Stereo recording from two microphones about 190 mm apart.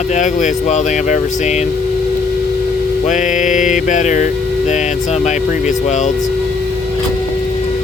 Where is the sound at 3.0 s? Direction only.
40° left (ahead or behind).